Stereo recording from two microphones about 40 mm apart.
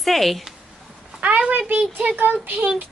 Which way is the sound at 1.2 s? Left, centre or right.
Right.